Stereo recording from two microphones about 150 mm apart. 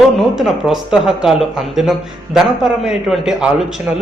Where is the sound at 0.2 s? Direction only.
Centre (ahead or behind).